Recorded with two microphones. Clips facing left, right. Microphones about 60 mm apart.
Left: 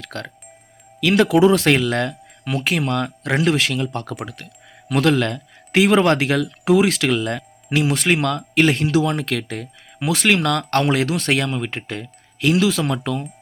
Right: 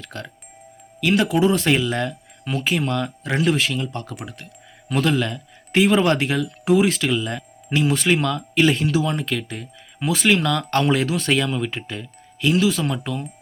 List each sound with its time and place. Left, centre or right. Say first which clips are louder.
0.0 s speech: left 3 dB; left
11.9 s speech: left 3 dB; left